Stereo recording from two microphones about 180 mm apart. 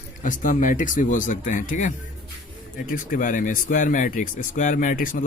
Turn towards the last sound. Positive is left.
turn(degrees=50)  # may be behind; listen again after turning